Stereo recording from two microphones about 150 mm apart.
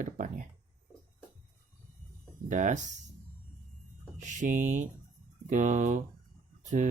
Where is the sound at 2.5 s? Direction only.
55° right (ahead or behind).